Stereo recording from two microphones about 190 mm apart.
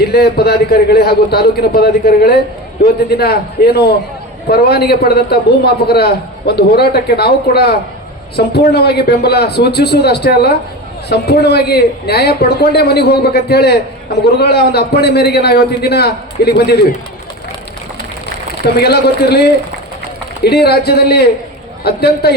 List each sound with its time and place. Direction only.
0.0 s a man's voice: 55° left (ahead or behind)
18.6 s a man's voice: 55° left (ahead or behind)